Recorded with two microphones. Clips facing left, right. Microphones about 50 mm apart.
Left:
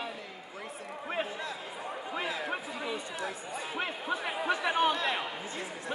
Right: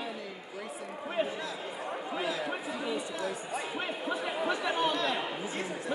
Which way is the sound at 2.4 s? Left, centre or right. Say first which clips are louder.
Right 1 dB; left.